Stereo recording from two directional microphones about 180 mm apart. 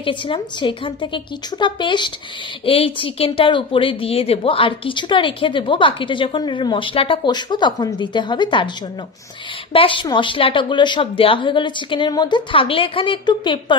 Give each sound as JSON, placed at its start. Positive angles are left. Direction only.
{"t": 0.0, "sound": "speech", "side_deg": 25}
{"t": 9.7, "sound": "speech", "side_deg": 30}